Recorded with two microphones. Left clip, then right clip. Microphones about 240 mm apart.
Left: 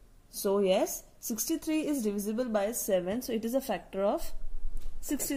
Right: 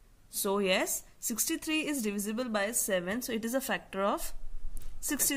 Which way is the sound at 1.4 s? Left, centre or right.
Right.